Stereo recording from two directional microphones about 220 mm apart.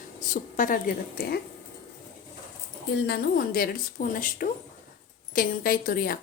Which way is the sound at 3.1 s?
40° left (ahead or behind).